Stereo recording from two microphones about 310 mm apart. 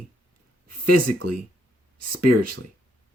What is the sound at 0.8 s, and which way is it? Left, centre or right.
Speech, right.